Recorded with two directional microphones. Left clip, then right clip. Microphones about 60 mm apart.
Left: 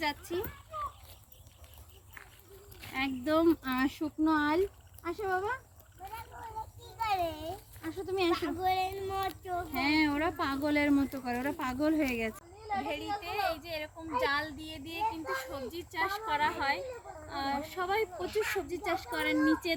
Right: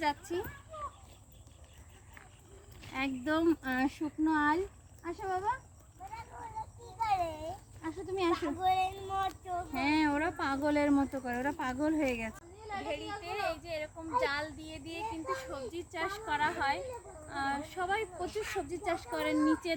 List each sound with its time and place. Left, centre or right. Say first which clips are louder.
0.0 s speech: right 1 dB; right
2.9 s speech: left 3 dB; right
6.3 s a sound: even; centre
7.2 s a sound: left 1 dB; centre
7.9 s speech: left 2 dB; right
8.3 s a child's voice: right 3 dB; centre
9.7 s speech: left 1 dB; right
10.8 s speech: left 1 dB; right
12.8 s a child's voice: left 3 dB; centre